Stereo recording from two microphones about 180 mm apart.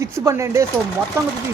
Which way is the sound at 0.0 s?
15° right (ahead or behind).